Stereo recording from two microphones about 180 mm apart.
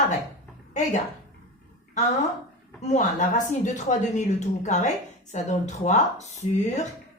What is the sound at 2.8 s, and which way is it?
Speech, 40° left (ahead or behind).